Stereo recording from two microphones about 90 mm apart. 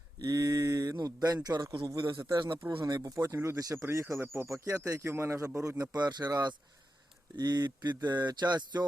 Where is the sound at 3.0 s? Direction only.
35° right (ahead or behind).